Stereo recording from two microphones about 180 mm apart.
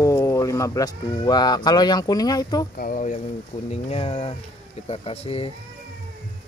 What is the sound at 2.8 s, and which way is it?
Speech, 50° left (ahead or behind).